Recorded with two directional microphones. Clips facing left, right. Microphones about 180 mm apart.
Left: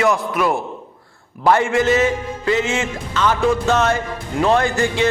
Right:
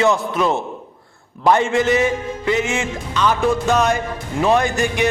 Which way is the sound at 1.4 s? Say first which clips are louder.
Even; 20° right (ahead or behind).